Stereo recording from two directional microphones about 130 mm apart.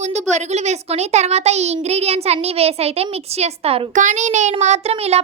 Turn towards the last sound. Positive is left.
turn(degrees=-55)  # may be behind; listen again after turning